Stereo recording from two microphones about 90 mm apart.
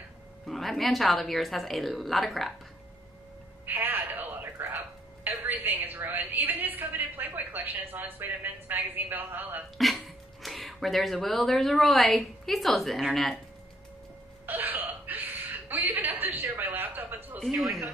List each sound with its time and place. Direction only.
0.5 s a woman's voice: centre (ahead or behind)
3.6 s a sound: 20° right (ahead or behind)
5.4 s a woman's voice: 20° right (ahead or behind)
9.8 s speech: centre (ahead or behind)
14.4 s chuckle: 20° right (ahead or behind)